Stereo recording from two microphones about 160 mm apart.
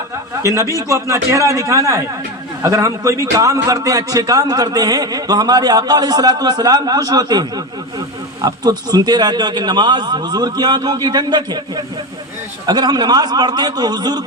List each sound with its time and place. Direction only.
0.4 s a man's voice: 20° right (ahead or behind)
12.6 s a man's voice: 25° right (ahead or behind)